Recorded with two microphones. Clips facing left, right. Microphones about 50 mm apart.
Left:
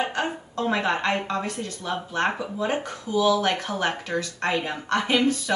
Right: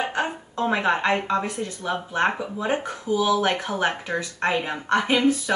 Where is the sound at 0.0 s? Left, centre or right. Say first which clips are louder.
Right 1 dB; right.